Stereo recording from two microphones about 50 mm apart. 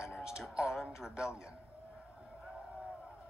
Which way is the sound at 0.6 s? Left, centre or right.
Centre.